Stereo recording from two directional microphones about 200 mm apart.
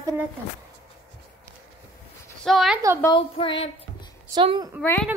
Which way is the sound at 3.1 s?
25° left (ahead or behind).